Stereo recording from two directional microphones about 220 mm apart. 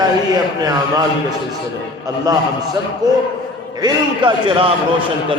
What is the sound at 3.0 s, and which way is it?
A man's voice, 20° right (ahead or behind).